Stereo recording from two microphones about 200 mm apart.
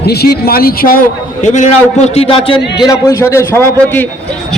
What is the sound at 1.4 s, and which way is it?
A man's voice, 40° left (ahead or behind).